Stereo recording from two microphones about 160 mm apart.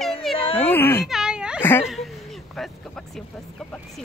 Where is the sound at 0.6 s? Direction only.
15° left (ahead or behind).